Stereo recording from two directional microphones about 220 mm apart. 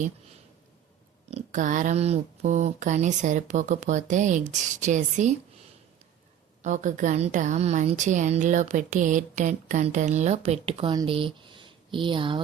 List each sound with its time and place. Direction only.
1.3 s a woman's voice: 30° right (ahead or behind)
6.6 s a woman's voice: 35° right (ahead or behind)